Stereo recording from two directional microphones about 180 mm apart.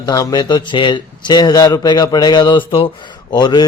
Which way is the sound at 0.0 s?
20° left (ahead or behind).